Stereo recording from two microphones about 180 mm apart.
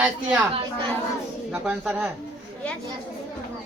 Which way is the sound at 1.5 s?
5° right (ahead or behind).